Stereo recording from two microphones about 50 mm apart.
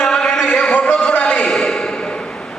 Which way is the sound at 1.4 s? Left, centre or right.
Centre.